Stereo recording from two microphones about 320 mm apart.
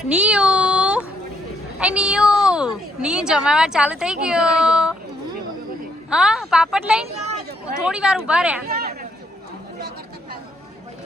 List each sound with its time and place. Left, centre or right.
0.1 s speech: centre
6.1 s speech: centre
8.6 s a sound: right